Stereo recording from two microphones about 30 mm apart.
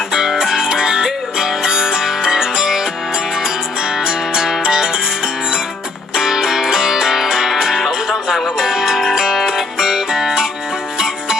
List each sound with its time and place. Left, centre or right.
0.1 s music: centre